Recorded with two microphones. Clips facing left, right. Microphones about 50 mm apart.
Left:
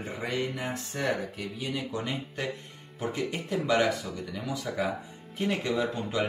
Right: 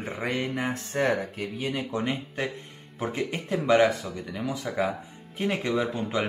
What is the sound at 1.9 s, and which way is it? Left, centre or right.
Speech, right.